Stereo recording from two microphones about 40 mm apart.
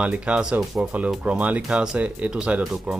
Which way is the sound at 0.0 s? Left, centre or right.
Right.